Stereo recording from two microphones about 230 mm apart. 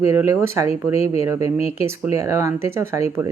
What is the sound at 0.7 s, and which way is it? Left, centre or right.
Speech, left.